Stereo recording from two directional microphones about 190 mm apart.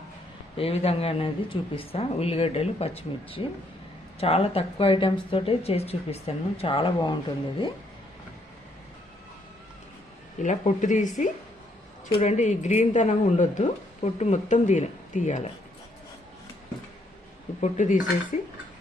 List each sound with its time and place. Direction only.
0.5 s speech: 30° left (ahead or behind)
10.4 s speech: 40° left (ahead or behind)
12.2 s speech: 40° left (ahead or behind)
17.6 s speech: 40° left (ahead or behind)